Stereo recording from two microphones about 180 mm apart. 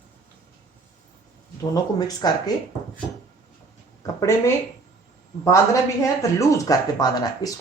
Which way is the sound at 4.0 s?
15° left (ahead or behind).